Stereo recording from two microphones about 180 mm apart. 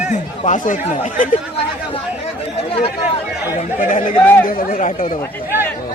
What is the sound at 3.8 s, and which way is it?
Speech, 50° left (ahead or behind).